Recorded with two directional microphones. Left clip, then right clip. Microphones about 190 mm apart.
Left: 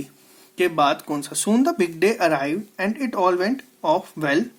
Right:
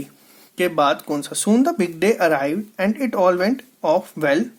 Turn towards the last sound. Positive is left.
turn(degrees=-25)  # may be behind; listen again after turning